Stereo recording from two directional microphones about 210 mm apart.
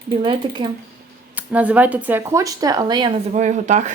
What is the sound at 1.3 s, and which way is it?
Speech, 5° right (ahead or behind).